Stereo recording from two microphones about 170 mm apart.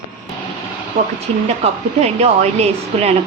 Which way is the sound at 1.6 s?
40° right (ahead or behind).